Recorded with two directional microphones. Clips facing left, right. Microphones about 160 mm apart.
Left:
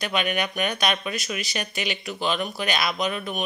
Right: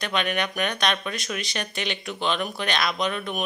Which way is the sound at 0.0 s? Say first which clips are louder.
Even; 5° left (ahead or behind).